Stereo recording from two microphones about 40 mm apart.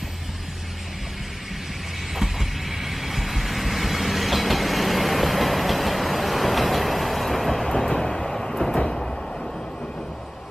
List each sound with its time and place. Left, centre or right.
2.1 s vehicle: centre